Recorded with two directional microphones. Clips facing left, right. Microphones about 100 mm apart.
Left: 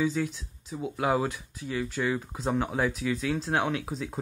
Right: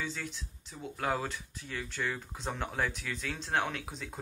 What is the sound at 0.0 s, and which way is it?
Speech, 5° left (ahead or behind).